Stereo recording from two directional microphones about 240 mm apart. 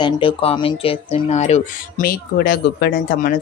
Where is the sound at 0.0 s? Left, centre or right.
Left.